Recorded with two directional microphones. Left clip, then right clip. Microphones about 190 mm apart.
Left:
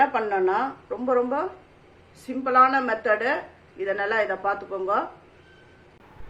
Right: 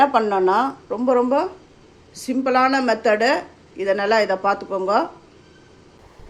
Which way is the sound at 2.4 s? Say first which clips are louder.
Right 1 dB; 40° right (ahead or behind).